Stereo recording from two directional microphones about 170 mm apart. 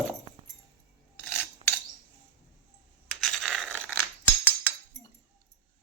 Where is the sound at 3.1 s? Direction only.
Centre (ahead or behind).